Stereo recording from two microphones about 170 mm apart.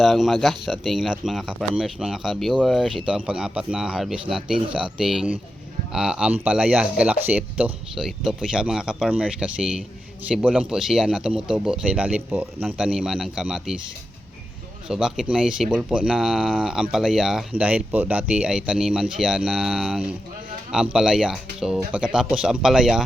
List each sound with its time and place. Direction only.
0.0 s speech: centre (ahead or behind)
14.8 s speech: 5° right (ahead or behind)